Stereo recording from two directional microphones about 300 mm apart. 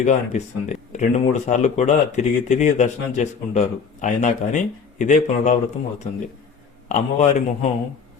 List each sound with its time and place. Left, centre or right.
0.0 s speech: left
6.8 s speech: left